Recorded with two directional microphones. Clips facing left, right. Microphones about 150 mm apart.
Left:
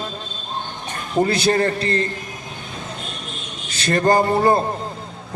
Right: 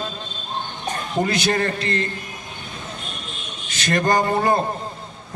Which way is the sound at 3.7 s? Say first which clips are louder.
Left 3 dB; 30° left (ahead or behind).